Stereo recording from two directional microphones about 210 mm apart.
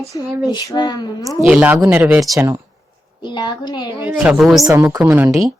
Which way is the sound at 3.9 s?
10° right (ahead or behind).